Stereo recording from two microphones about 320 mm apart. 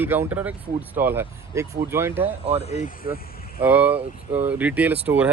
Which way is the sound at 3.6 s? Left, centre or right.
Centre.